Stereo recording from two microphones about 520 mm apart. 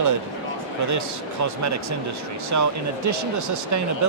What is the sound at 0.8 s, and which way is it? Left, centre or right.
Speech, right.